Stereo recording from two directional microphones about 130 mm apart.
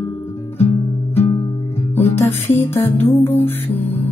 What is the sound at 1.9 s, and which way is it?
Music, 20° left (ahead or behind).